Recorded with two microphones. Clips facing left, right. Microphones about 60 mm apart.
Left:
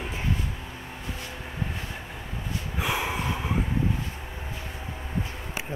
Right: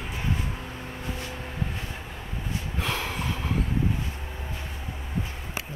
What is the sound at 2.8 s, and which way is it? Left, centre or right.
Snort, centre.